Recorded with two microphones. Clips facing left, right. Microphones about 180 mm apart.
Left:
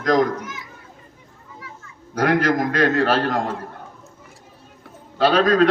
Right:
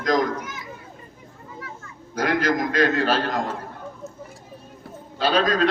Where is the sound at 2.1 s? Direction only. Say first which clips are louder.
Left 3 dB; 60° left (ahead or behind).